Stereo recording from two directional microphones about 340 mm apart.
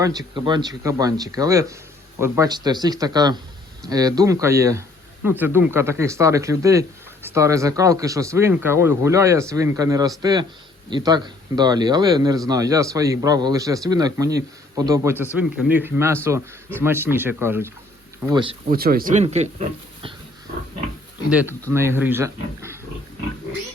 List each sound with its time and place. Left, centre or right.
0.0 s speech: centre
18.7 s speech: right
21.2 s speech: centre